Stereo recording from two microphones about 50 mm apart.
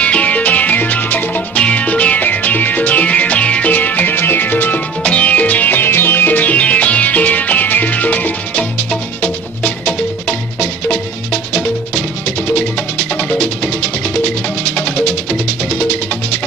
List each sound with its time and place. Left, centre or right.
0.0 s music: left
3.7 s music: left
5.0 s music: left